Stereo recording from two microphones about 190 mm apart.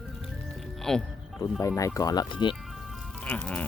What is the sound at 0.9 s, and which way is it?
Speech, 5° left (ahead or behind).